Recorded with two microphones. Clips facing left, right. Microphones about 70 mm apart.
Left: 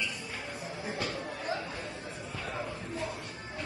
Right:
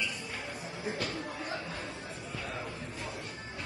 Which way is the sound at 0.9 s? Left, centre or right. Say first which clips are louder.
Left 1 dB; left.